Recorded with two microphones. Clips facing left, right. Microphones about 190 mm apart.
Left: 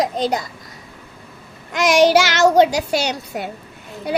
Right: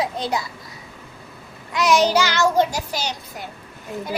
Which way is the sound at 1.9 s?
90° left.